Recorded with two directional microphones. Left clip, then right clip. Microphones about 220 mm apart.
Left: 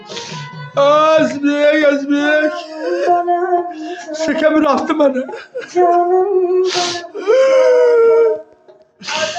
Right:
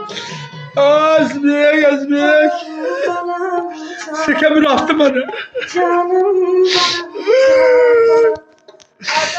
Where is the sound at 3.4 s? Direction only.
45° right (ahead or behind).